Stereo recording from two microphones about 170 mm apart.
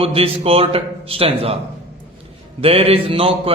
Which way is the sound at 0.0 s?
35° right (ahead or behind).